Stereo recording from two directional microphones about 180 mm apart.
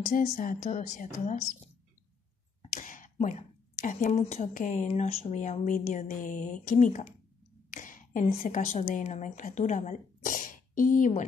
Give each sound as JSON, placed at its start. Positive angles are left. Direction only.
{"t": 0.0, "sound": "speech", "side_deg": 50}
{"t": 2.6, "sound": "speech", "side_deg": 45}
{"t": 7.7, "sound": "a sound", "side_deg": 50}
{"t": 8.4, "sound": "speech", "side_deg": 45}